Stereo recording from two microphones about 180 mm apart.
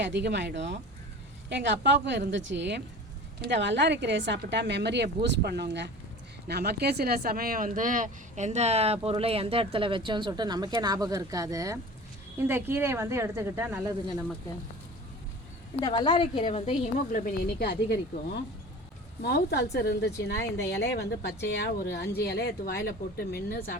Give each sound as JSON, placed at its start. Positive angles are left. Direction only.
{"t": 0.0, "sound": "a woman's voice", "side_deg": -75}
{"t": 15.8, "sound": "a woman's voice", "side_deg": 25}
{"t": 17.4, "sound": "a woman's voice", "side_deg": 65}
{"t": 19.2, "sound": "a woman's voice", "side_deg": 65}